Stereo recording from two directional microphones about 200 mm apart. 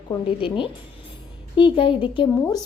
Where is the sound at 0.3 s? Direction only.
25° left (ahead or behind).